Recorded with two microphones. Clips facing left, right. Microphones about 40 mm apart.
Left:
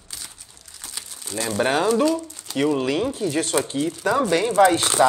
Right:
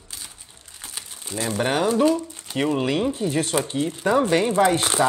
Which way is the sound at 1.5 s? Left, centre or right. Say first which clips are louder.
Left 2 dB; left.